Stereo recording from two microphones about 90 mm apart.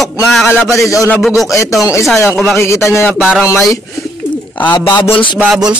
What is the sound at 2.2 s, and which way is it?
Speech, 30° left (ahead or behind).